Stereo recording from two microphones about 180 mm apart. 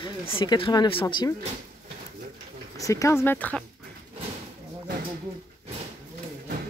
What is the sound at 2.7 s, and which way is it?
Speech, 20° left (ahead or behind).